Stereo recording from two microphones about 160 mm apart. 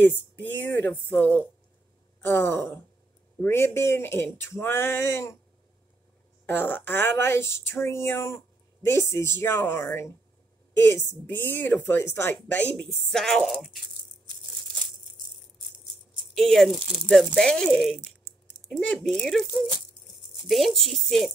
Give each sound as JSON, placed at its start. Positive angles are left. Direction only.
{"t": 0.0, "sound": "speech", "side_deg": 10}
{"t": 6.4, "sound": "speech", "side_deg": 15}
{"t": 16.3, "sound": "speech", "side_deg": 0}